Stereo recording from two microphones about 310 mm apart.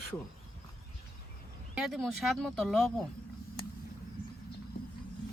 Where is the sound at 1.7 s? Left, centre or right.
Centre.